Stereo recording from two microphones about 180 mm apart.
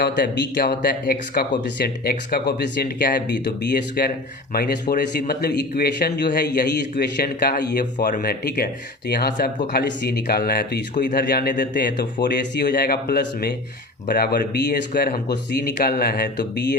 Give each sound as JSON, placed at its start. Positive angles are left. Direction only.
{"t": 0.0, "sound": "speech", "side_deg": 60}
{"t": 7.9, "sound": "speech", "side_deg": 50}
{"t": 11.8, "sound": "speech", "side_deg": 50}
{"t": 12.2, "sound": "speech", "side_deg": 70}